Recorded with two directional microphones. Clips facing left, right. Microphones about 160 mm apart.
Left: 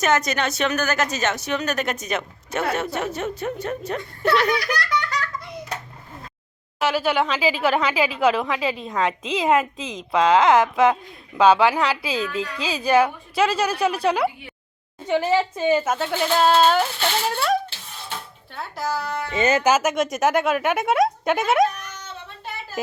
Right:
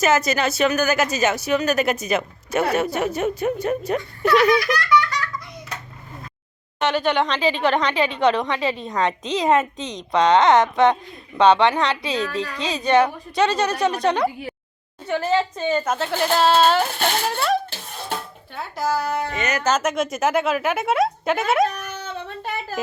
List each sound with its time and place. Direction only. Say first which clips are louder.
0.0 s a woman's voice: right 2 dB; 5° right (ahead or behind)
4.8 s laughter: right 6 dB; 35° left (ahead or behind)
6.7 s a woman's voice: right 1 dB; 5° left (ahead or behind)
12.2 s a woman's voice: right 1 dB; 35° right (ahead or behind)
12.6 s a woman's voice: right 1 dB; 5° left (ahead or behind)
16.8 s speech: right 2 dB; 50° right (ahead or behind)
17.3 s a woman's voice: left 1 dB; centre (ahead or behind)
17.7 s a sound: right 5 dB; 45° right (ahead or behind)
18.5 s a woman's voice: right 3 dB; centre (ahead or behind)
19.4 s speech: left 5 dB; 30° left (ahead or behind)
19.6 s a woman's voice: left 2 dB; 5° left (ahead or behind)